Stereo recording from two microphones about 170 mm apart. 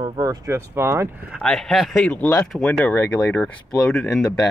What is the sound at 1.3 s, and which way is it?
Speech, centre (ahead or behind).